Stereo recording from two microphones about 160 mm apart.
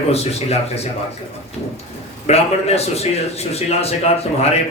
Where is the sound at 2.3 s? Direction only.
40° left (ahead or behind).